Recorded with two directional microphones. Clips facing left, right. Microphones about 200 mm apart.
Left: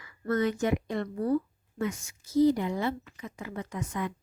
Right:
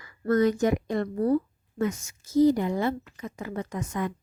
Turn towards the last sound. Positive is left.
turn(degrees=-45)  # may be behind; listen again after turning